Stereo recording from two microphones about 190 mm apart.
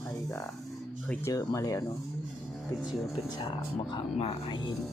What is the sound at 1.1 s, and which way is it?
Speech, 15° left (ahead or behind).